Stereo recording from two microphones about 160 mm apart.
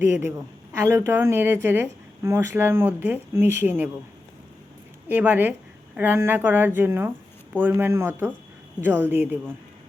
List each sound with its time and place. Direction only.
0.0 s speech: 15° right (ahead or behind)
5.0 s speech: 10° right (ahead or behind)